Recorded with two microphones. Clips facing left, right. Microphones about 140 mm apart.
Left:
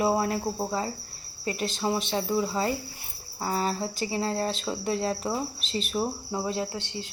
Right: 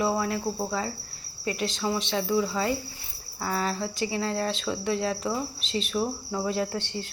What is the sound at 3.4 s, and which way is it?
A woman's voice, 35° left (ahead or behind).